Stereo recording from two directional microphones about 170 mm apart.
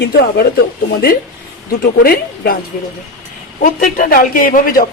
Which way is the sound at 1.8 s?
65° left (ahead or behind).